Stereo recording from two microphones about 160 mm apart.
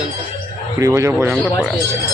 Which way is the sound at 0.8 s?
20° right (ahead or behind).